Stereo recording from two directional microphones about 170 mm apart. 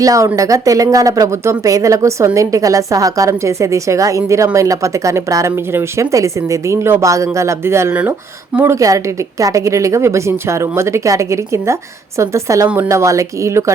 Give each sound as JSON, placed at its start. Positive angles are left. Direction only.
{"t": 0.0, "sound": "a woman's voice", "side_deg": -20}